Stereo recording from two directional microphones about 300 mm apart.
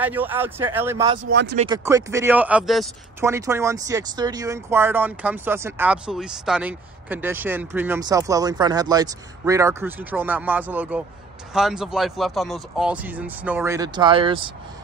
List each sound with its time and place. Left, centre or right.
0.0 s speech: centre
1.2 s speech: right
1.6 s speech: centre